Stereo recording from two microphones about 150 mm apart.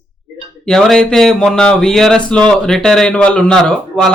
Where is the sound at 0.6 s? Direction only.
5° left (ahead or behind).